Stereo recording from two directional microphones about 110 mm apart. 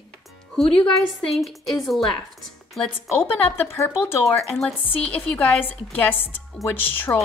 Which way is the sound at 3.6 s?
20° left (ahead or behind).